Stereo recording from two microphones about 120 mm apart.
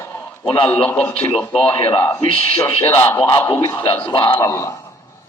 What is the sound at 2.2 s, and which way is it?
Speech, 50° left (ahead or behind).